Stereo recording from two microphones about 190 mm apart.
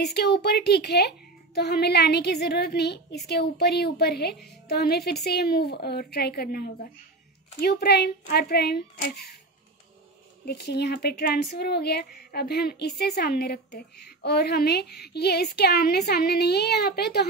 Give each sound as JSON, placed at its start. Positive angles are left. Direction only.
{"t": 0.0, "sound": "a woman's voice", "side_deg": 60}
{"t": 10.4, "sound": "a woman's voice", "side_deg": 55}